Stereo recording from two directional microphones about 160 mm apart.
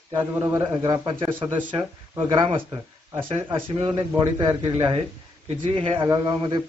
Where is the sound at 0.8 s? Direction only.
30° right (ahead or behind).